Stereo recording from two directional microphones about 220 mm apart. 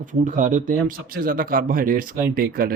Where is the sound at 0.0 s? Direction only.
35° right (ahead or behind).